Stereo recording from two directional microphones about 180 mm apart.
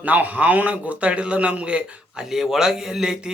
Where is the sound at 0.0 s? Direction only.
10° right (ahead or behind).